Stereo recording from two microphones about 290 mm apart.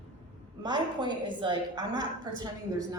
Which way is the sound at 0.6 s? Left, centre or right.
Centre.